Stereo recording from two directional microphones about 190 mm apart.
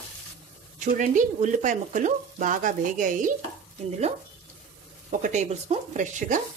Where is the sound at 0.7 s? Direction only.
40° right (ahead or behind).